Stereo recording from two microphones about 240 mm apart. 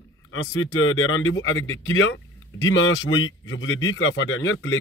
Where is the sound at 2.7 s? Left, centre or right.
Left.